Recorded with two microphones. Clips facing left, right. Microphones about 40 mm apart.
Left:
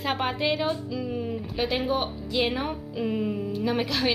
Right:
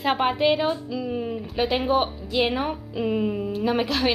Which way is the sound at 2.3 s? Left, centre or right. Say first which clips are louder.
Right 3 dB; centre.